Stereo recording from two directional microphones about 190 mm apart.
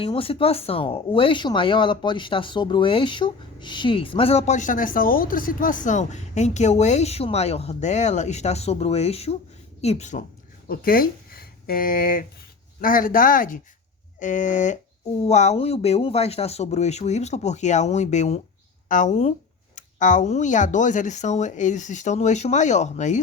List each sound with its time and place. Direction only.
0.0 s speech: 30° left (ahead or behind)
10.7 s speech: 50° left (ahead or behind)